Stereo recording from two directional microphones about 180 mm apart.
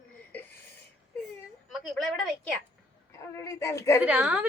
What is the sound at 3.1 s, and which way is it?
Speech, 15° left (ahead or behind).